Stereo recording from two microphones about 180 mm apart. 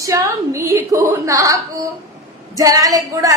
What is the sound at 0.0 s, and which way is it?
A woman's voice, 20° right (ahead or behind).